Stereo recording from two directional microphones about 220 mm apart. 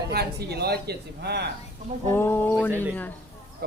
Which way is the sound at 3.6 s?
45° right (ahead or behind).